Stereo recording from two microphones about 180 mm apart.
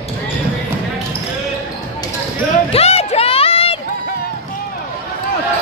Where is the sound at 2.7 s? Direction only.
35° left (ahead or behind).